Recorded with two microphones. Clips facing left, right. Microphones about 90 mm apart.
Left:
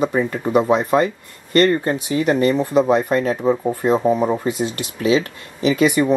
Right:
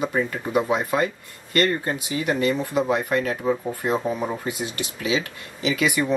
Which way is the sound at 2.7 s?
25° left (ahead or behind).